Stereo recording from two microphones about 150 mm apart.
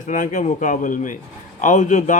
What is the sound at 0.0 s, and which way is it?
Speech, 60° left (ahead or behind).